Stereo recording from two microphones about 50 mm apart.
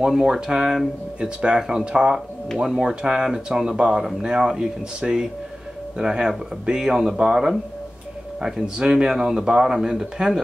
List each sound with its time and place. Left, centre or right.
0.0 s a man's voice: centre